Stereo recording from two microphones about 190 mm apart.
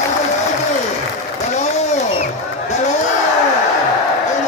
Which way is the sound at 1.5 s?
40° left (ahead or behind).